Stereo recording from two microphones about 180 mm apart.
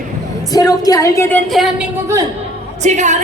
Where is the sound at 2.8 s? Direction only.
40° right (ahead or behind).